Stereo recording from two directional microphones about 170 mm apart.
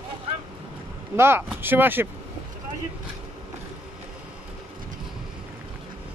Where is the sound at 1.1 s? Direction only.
15° right (ahead or behind).